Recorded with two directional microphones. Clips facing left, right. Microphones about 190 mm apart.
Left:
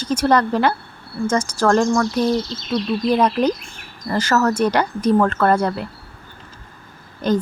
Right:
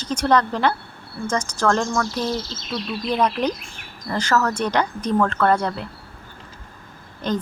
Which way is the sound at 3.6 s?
Centre (ahead or behind).